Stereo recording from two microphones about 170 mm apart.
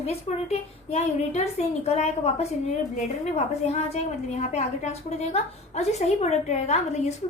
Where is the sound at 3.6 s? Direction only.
40° left (ahead or behind).